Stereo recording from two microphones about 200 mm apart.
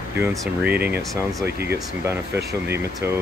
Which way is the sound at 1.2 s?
15° right (ahead or behind).